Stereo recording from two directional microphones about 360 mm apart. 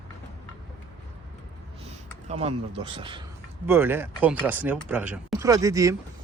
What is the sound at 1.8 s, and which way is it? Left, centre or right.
Speech, centre.